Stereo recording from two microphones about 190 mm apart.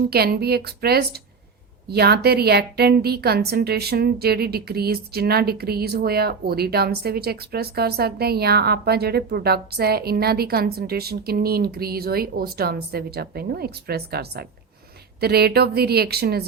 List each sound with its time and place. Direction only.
0.1 s a woman's voice: 55° right (ahead or behind)